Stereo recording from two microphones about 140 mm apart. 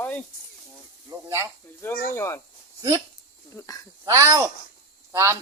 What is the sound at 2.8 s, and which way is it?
Speech, 25° right (ahead or behind).